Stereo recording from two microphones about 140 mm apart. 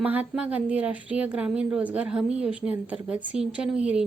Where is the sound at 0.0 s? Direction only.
10° right (ahead or behind).